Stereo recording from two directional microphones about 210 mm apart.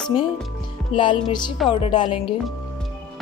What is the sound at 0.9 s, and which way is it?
Speech, 25° left (ahead or behind).